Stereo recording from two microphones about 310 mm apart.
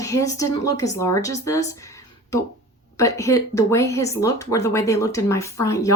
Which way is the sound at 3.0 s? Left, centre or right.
Centre.